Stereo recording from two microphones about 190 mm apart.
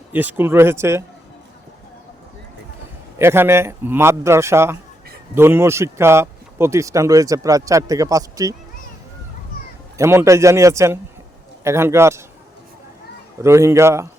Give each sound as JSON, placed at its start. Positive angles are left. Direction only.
{"t": 0.1, "sound": "speech", "side_deg": -10}
{"t": 3.2, "sound": "speech", "side_deg": -10}
{"t": 10.0, "sound": "speech", "side_deg": -15}
{"t": 13.4, "sound": "speech", "side_deg": -15}